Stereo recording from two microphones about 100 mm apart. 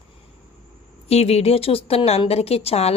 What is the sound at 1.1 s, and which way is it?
A woman's voice, 90° left.